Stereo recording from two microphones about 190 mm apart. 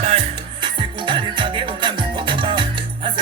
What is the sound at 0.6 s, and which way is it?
Music, 25° right (ahead or behind).